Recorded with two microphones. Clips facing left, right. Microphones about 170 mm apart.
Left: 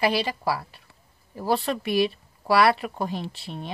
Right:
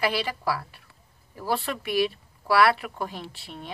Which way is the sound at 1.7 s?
35° left (ahead or behind).